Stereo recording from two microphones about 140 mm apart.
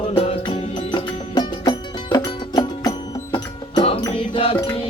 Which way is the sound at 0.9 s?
30° left (ahead or behind).